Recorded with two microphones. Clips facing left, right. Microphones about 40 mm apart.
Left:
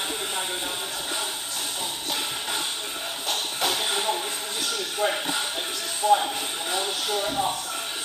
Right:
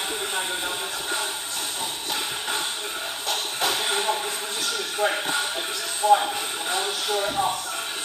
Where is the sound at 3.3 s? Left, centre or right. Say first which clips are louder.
Right 1 dB; right.